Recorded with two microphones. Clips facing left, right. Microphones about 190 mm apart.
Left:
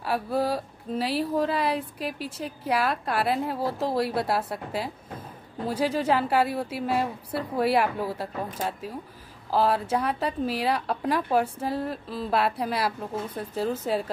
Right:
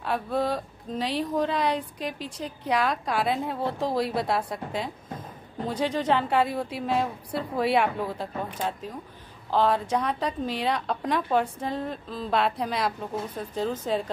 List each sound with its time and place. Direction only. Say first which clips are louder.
0.0 s a woman's voice: left 1 dB; 5° left (ahead or behind)